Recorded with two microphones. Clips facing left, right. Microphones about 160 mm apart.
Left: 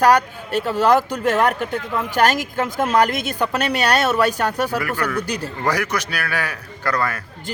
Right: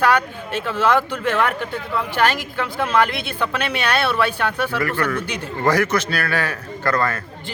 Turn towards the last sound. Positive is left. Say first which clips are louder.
# right 2 dB
turn(degrees=10)  # may be behind; listen again after turning